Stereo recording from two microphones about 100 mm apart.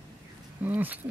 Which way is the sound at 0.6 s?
20° right (ahead or behind).